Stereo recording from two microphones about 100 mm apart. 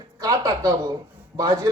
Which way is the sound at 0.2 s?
35° right (ahead or behind).